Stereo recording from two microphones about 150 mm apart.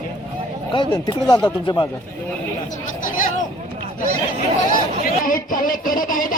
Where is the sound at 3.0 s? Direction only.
65° left (ahead or behind).